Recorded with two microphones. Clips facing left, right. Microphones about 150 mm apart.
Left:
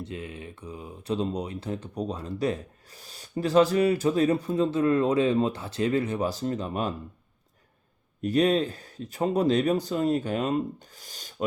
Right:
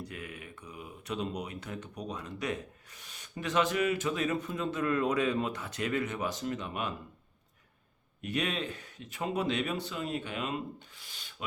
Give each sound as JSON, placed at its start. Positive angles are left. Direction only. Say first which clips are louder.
{"t": 0.0, "sound": "speech", "louder": "left 6 dB", "side_deg": 25}
{"t": 8.2, "sound": "speech", "louder": "left 11 dB", "side_deg": 35}